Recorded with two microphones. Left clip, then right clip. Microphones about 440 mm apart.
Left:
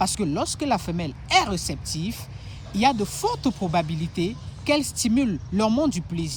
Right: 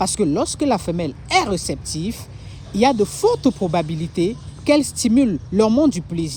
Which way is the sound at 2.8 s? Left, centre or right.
Centre.